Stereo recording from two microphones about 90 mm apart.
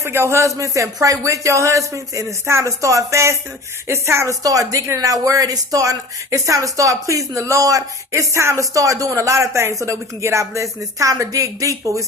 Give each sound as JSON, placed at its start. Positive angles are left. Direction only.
{"t": 0.0, "sound": "speech", "side_deg": -30}